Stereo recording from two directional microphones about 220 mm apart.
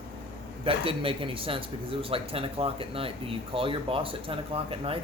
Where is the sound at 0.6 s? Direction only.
25° right (ahead or behind).